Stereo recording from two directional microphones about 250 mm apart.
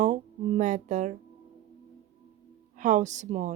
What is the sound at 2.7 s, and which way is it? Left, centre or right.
Speech, right.